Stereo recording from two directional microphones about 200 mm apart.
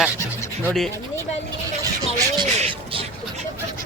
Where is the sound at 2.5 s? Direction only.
30° right (ahead or behind).